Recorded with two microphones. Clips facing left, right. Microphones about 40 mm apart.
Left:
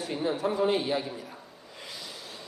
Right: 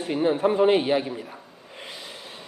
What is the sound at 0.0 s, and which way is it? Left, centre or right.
A woman's voice, right.